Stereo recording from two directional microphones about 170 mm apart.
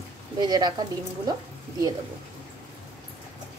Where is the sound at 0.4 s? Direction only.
25° right (ahead or behind).